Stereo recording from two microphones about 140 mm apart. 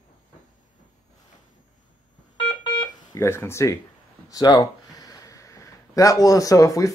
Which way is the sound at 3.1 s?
20° left (ahead or behind).